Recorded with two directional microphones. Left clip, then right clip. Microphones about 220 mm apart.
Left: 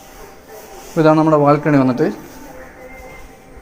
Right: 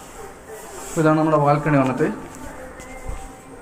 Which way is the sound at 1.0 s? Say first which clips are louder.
Left 5 dB; 50° left (ahead or behind).